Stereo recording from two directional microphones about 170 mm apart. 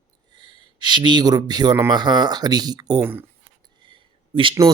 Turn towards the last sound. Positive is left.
turn(degrees=-30)  # may be behind; listen again after turning